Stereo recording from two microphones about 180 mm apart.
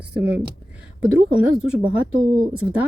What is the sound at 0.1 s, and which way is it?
Speech, 10° right (ahead or behind).